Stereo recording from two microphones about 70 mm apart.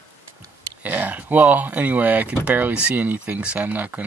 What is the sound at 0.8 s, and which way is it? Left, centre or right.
Speech, right.